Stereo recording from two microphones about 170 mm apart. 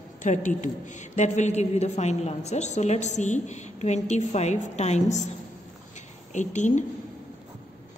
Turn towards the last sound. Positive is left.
turn(degrees=45)  # may be behind; listen again after turning